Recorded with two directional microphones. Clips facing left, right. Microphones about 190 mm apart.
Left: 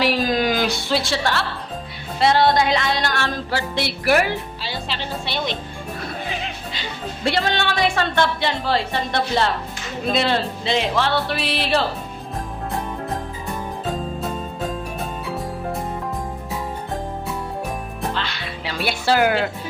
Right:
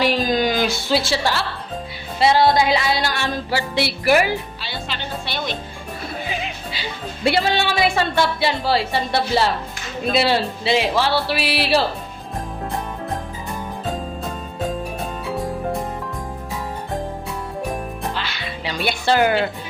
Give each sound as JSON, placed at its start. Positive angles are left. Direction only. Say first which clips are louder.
{"t": 0.0, "sound": "music", "louder": "right 1 dB", "side_deg": 5}
{"t": 5.2, "sound": "speech", "louder": "left 2 dB", "side_deg": 25}
{"t": 7.3, "sound": "a woman's voice", "louder": "right 3 dB", "side_deg": -10}
{"t": 18.1, "sound": "music", "louder": "even", "side_deg": 0}